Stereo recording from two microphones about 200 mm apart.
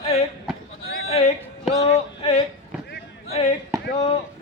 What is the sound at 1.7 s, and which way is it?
Music, 30° left (ahead or behind).